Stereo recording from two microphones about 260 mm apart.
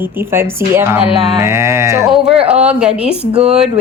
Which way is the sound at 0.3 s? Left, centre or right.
Centre.